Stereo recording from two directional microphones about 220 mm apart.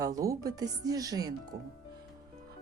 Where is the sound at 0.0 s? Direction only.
15° right (ahead or behind).